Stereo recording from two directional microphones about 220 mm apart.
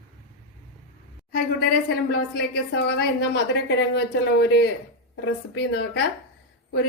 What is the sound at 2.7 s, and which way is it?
A woman's voice, 50° left (ahead or behind).